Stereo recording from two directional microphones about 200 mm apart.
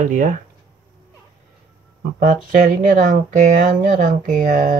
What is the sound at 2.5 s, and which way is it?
Speech, 45° right (ahead or behind).